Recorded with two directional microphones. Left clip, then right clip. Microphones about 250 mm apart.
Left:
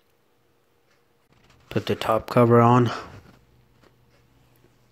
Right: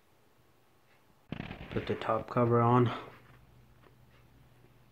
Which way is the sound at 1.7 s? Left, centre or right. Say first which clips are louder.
Left 9 dB; left.